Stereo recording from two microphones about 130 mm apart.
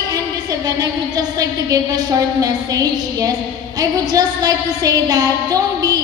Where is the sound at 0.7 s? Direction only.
30° right (ahead or behind).